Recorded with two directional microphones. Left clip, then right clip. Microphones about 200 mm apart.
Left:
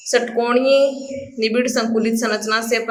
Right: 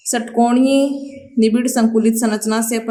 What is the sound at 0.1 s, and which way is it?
A woman's voice, 35° right (ahead or behind).